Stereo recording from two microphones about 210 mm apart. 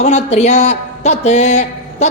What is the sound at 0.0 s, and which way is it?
Speech, 30° left (ahead or behind).